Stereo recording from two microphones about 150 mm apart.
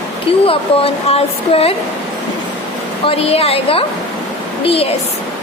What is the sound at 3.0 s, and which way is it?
Speech, 40° left (ahead or behind).